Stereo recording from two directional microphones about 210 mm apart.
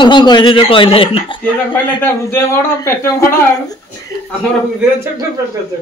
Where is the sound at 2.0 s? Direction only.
10° left (ahead or behind).